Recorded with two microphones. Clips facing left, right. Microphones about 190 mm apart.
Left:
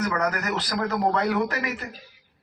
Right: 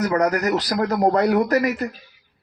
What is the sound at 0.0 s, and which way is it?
A man's voice, 35° right (ahead or behind).